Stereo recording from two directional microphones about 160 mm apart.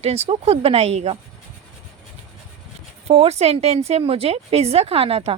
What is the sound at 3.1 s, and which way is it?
A woman's voice, 40° right (ahead or behind).